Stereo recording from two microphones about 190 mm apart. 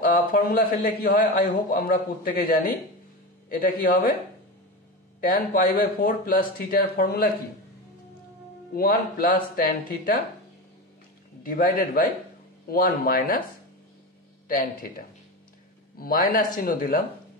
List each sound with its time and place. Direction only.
0.0 s a man's voice: 45° left (ahead or behind)
5.2 s a man's voice: 50° left (ahead or behind)
8.7 s a man's voice: 50° left (ahead or behind)
11.4 s a man's voice: 50° left (ahead or behind)
14.5 s a man's voice: 50° left (ahead or behind)